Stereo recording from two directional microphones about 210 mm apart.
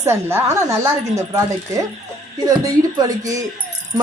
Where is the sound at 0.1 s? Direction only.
10° right (ahead or behind).